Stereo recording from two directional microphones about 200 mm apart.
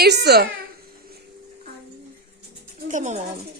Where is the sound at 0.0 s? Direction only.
55° right (ahead or behind).